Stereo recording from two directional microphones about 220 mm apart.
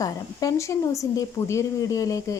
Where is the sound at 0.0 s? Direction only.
15° left (ahead or behind).